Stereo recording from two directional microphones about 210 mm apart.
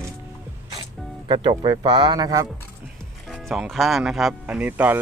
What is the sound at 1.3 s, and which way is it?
Speech, 20° right (ahead or behind).